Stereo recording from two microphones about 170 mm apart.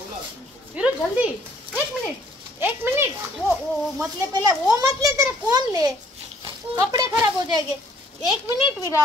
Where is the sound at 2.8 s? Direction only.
15° right (ahead or behind).